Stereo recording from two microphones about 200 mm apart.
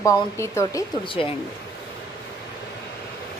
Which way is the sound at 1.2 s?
30° left (ahead or behind).